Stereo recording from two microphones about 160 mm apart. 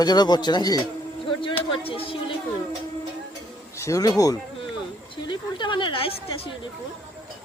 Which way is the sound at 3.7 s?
20° left (ahead or behind).